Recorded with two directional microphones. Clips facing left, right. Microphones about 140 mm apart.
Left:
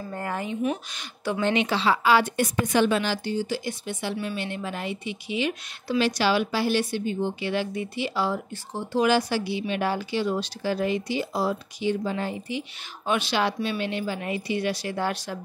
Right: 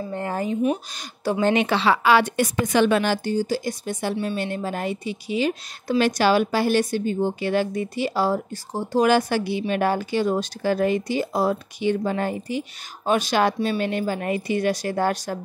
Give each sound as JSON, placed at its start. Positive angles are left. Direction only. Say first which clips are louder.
{"t": 0.1, "sound": "speech", "louder": "right 1 dB", "side_deg": -25}
{"t": 0.9, "sound": "a woman's voice", "louder": "right 4 dB", "side_deg": -35}
{"t": 3.0, "sound": "a woman's voice", "louder": "right 4 dB", "side_deg": -50}